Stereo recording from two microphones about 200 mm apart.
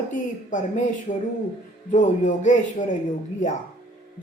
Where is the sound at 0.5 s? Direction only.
40° left (ahead or behind).